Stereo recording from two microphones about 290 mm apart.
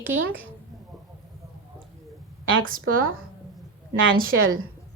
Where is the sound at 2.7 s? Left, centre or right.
Right.